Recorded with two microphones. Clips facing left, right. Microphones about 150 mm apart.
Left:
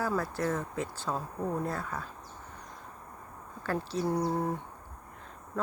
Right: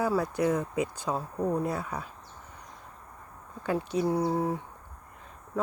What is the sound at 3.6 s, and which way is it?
Speech, 15° right (ahead or behind).